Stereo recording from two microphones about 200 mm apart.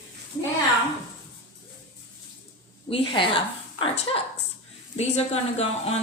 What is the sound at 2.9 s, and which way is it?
Speech, 25° left (ahead or behind).